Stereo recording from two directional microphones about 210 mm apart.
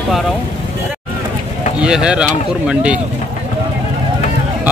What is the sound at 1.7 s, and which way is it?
Speech, 5° right (ahead or behind).